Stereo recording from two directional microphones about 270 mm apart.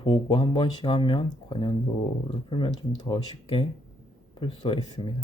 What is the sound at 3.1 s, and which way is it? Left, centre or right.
Speech, centre.